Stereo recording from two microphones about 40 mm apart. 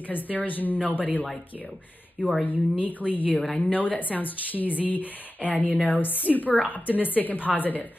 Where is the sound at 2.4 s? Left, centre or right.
Left.